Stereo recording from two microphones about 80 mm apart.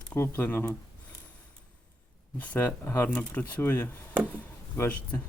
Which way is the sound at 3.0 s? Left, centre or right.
Centre.